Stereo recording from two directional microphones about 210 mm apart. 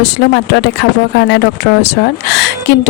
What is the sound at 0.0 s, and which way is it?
Speech, 55° left (ahead or behind).